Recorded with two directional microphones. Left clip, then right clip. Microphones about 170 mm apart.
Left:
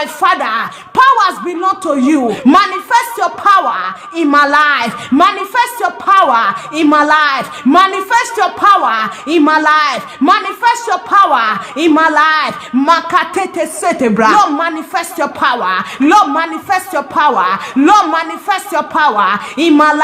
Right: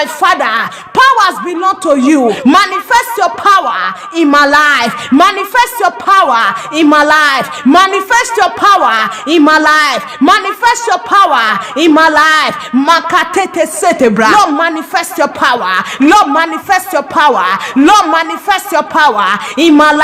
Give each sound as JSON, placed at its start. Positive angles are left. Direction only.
{"t": 0.0, "sound": "a woman's voice", "side_deg": -45}